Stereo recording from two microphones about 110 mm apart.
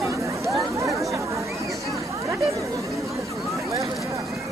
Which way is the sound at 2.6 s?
30° right (ahead or behind).